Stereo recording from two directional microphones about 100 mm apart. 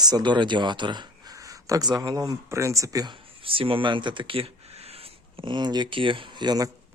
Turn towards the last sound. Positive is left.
turn(degrees=-45)  # may be behind; listen again after turning